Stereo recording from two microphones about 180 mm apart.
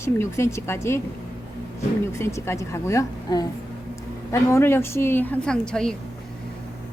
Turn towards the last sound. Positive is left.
turn(degrees=5)  # may be behind; listen again after turning